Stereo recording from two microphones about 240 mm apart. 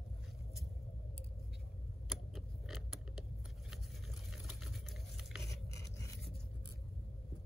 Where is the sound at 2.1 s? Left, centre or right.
Centre.